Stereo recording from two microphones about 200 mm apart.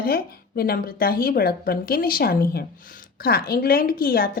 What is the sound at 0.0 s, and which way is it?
Speech, 50° left (ahead or behind).